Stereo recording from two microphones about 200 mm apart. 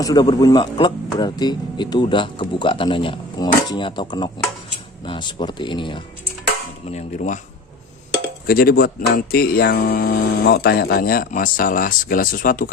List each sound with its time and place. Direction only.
0.0 s speech: 20° left (ahead or behind)
6.8 s speech: 35° left (ahead or behind)
8.4 s speech: 50° left (ahead or behind)